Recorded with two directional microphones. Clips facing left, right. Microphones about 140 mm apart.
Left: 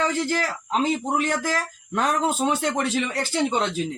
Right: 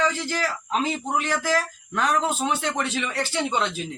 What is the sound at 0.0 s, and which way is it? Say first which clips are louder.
Speech: left 2 dB; 45° left (ahead or behind).